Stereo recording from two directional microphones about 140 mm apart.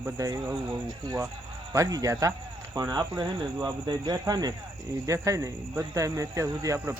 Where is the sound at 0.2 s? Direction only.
20° right (ahead or behind).